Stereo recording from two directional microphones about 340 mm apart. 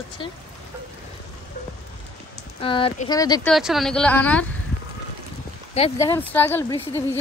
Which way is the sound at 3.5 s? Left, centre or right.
Centre.